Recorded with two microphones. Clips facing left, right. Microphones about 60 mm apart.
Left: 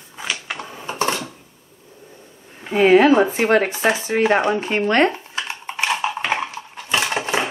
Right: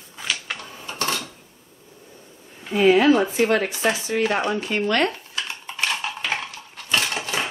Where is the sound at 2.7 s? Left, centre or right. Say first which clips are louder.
Left 3 dB; left.